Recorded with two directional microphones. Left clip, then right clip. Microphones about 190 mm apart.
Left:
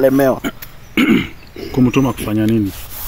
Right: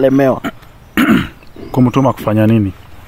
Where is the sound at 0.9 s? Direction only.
65° right (ahead or behind).